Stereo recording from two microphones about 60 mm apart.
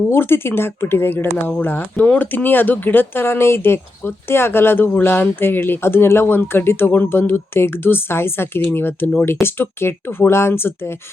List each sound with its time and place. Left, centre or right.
0.1 s speech: left